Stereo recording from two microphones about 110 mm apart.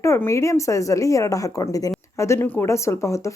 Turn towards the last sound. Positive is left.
turn(degrees=25)  # may be behind; listen again after turning